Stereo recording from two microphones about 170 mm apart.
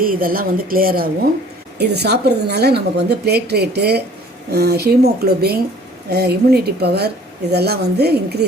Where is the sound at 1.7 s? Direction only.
75° right (ahead or behind).